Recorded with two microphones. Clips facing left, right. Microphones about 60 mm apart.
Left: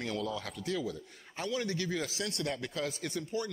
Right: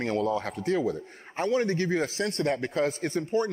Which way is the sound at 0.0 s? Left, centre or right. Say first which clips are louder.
Right 9 dB; right.